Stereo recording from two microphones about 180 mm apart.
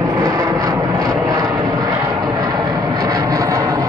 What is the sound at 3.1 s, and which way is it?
Vehicle, 20° right (ahead or behind).